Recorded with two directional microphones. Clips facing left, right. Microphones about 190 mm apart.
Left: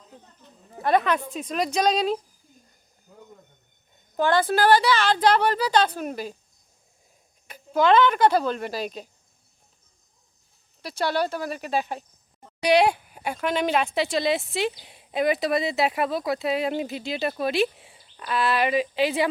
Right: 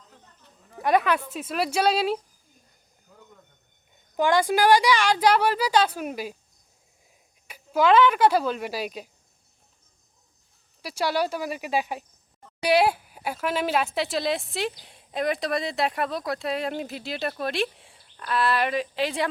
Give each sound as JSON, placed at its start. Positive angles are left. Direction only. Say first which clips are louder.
{"t": 0.1, "sound": "a sound", "louder": "left 5 dB", "side_deg": 20}
{"t": 0.8, "sound": "a woman's voice", "louder": "even", "side_deg": -10}
{"t": 4.2, "sound": "a woman's voice", "louder": "even", "side_deg": -15}
{"t": 7.4, "sound": "speech", "louder": "left 1 dB", "side_deg": -10}
{"t": 10.8, "sound": "a woman's voice", "louder": "even", "side_deg": -10}